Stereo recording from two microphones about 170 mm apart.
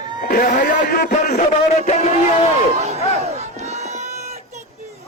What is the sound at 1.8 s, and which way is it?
Speech, 40° left (ahead or behind).